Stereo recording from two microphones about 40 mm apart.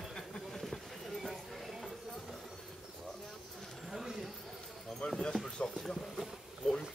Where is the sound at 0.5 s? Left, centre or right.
Centre.